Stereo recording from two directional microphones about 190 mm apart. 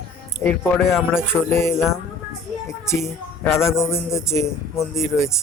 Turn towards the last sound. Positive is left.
turn(degrees=15)  # may be behind; listen again after turning